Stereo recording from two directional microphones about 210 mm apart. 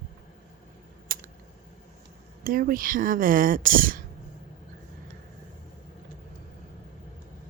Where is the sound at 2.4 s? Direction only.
45° right (ahead or behind).